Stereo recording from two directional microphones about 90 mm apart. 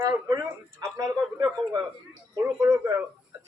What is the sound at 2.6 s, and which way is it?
Speech, 45° right (ahead or behind).